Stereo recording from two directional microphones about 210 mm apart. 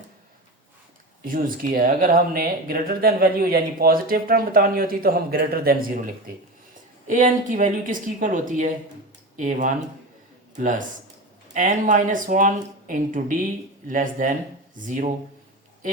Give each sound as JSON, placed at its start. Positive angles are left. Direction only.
{"t": 1.2, "sound": "speech", "side_deg": -40}
{"t": 7.1, "sound": "speech", "side_deg": -40}